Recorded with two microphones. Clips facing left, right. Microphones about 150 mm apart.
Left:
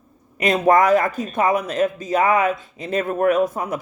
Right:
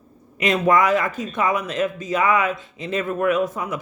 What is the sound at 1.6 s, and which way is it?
Speech, 35° left (ahead or behind).